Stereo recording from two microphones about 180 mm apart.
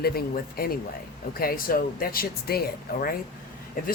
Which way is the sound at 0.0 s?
55° left (ahead or behind).